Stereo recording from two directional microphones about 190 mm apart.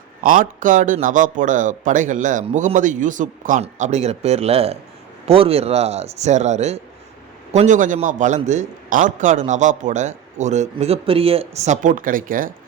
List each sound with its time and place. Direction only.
0.2 s a man's voice: 45° right (ahead or behind)